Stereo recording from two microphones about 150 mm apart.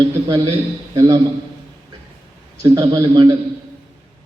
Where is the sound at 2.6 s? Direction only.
25° right (ahead or behind).